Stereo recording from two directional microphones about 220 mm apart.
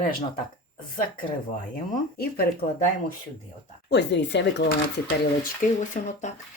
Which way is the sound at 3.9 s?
55° left (ahead or behind).